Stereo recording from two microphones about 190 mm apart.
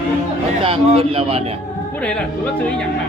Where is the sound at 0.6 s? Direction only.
30° right (ahead or behind).